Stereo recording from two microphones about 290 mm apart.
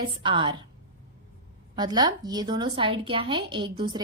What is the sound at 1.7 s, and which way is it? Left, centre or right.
A woman's voice, centre.